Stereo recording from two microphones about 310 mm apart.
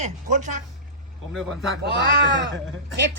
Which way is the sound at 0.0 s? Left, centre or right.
Right.